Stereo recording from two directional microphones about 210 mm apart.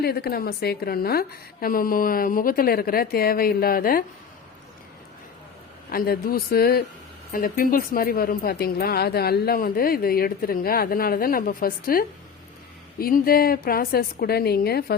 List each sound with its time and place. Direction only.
0.0 s a woman's voice: 50° left (ahead or behind)
5.9 s a woman's voice: 45° left (ahead or behind)